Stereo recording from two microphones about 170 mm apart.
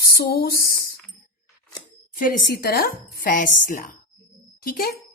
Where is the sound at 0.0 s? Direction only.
60° left (ahead or behind).